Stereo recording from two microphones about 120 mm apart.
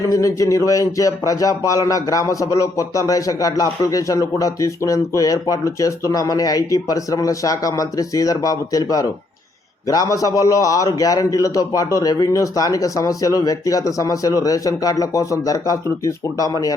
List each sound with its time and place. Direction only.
0.1 s speech: 25° left (ahead or behind)